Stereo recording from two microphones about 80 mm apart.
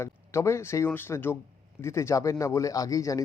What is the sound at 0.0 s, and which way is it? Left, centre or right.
Speech, left.